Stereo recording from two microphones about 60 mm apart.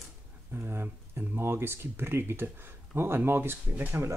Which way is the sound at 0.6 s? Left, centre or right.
Right.